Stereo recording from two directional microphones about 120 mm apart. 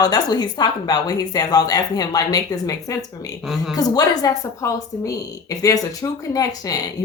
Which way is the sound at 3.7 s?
30° left (ahead or behind).